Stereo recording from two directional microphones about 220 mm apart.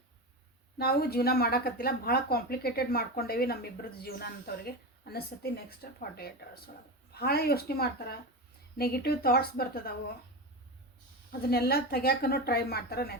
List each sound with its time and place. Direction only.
0.8 s speech: 45° left (ahead or behind)
11.3 s speech: 45° left (ahead or behind)